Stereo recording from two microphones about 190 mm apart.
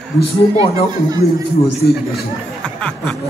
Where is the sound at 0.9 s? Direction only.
20° right (ahead or behind).